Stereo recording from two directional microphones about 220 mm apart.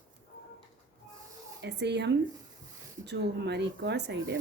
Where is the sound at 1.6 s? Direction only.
50° right (ahead or behind).